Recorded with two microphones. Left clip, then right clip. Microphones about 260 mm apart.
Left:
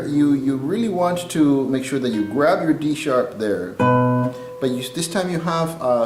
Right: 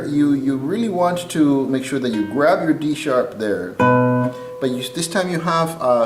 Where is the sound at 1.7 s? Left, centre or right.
Centre.